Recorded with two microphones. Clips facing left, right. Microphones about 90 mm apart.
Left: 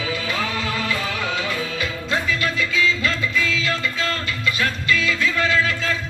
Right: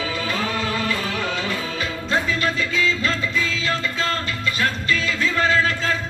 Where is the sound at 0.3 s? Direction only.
35° right (ahead or behind).